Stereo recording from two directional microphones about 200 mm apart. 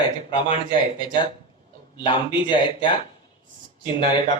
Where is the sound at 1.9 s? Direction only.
25° left (ahead or behind).